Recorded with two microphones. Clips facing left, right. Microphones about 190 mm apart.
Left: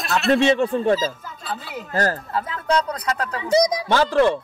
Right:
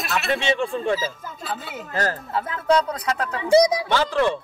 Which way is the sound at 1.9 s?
40° left (ahead or behind).